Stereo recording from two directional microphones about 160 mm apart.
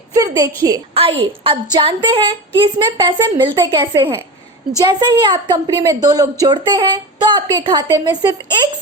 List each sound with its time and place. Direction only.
0.1 s a woman's voice: 20° right (ahead or behind)
0.9 s a woman's voice: 35° right (ahead or behind)